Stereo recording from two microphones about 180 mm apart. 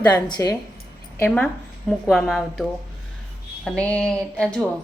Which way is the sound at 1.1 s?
10° left (ahead or behind).